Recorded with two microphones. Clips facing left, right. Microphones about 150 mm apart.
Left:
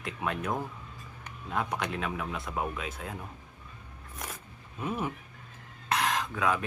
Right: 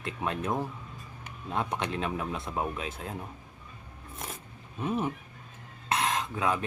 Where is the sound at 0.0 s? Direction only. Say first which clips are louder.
Right 1 dB; 25° right (ahead or behind).